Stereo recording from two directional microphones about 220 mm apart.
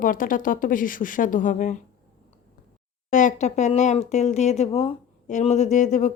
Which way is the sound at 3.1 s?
35° left (ahead or behind).